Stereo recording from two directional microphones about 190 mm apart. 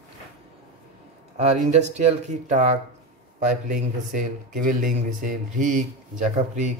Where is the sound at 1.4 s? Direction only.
35° right (ahead or behind).